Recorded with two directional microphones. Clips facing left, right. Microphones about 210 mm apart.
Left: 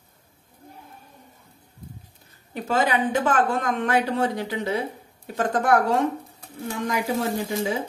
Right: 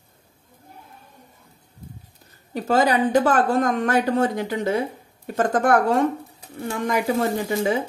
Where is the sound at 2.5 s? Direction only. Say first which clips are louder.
Right 4 dB; 40° right (ahead or behind).